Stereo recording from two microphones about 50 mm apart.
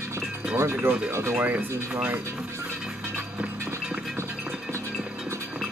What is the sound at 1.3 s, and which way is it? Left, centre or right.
Speech, right.